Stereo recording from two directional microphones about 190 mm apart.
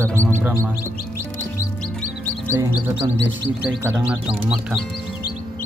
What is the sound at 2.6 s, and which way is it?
Speech, 15° right (ahead or behind).